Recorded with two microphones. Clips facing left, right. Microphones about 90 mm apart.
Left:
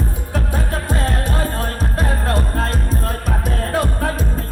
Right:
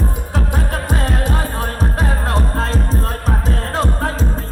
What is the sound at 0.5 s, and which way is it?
Music, 20° right (ahead or behind).